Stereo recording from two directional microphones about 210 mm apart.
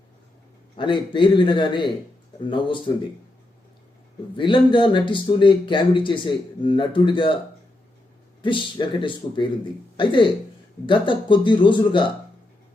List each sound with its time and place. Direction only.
0.8 s a man's voice: 20° left (ahead or behind)
4.4 s a man's voice: 25° left (ahead or behind)
8.4 s a man's voice: 25° left (ahead or behind)